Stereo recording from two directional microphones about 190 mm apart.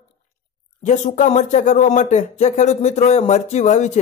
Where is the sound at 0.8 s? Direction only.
40° left (ahead or behind).